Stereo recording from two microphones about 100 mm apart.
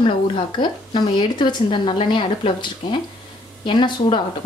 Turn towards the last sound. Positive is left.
turn(degrees=50)  # may be behind; listen again after turning